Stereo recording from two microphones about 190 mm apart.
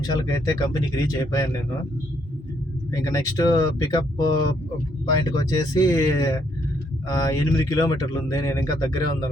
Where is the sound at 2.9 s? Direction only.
20° left (ahead or behind).